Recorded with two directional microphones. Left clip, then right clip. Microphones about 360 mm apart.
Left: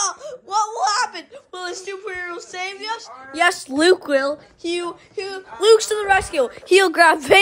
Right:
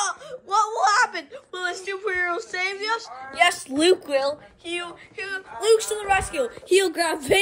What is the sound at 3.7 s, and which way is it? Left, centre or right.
Speech, centre.